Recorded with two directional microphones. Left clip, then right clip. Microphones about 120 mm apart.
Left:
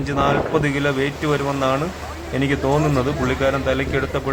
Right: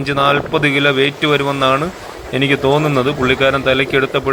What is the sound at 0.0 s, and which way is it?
Speech, 15° right (ahead or behind).